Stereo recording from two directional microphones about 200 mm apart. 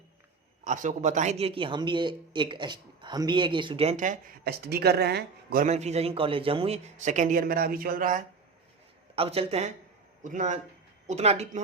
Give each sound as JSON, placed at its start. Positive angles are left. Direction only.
{"t": 0.6, "sound": "a man's voice", "side_deg": -40}
{"t": 9.1, "sound": "a man's voice", "side_deg": -30}